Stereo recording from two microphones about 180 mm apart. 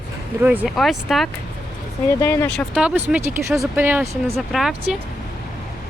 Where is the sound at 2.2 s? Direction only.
15° left (ahead or behind).